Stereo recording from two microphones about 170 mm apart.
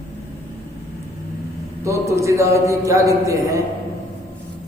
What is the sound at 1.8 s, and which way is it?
A man's voice, 15° right (ahead or behind).